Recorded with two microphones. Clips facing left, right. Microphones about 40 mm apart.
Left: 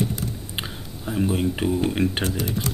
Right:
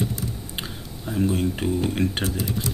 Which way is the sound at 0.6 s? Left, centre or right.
Centre.